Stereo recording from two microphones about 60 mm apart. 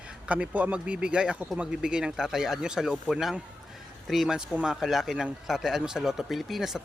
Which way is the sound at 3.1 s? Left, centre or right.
Centre.